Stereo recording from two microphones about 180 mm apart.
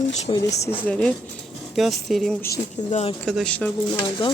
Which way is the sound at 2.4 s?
20° left (ahead or behind).